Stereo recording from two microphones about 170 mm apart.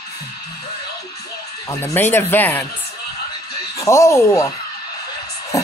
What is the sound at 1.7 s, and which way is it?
Speech, 15° left (ahead or behind).